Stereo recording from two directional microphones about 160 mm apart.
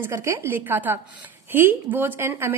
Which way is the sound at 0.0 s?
15° right (ahead or behind).